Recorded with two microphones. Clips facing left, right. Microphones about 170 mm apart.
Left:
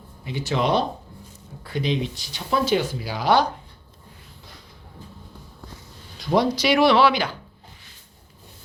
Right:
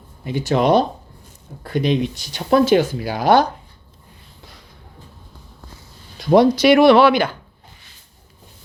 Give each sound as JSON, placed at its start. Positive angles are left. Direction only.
{"t": 0.3, "sound": "speech", "side_deg": -50}
{"t": 6.1, "sound": "speech", "side_deg": -55}